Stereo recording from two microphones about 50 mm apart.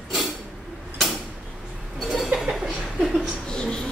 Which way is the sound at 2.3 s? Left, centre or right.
Centre.